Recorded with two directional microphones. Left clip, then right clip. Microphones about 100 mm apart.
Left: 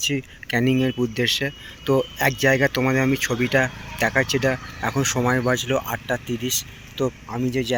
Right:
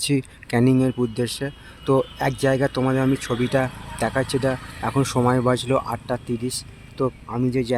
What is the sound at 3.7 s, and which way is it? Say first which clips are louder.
Speech: left 3 dB; 5° right (ahead or behind).